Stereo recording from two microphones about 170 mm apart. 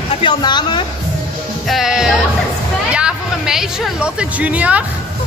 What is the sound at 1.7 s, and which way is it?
Music, centre (ahead or behind).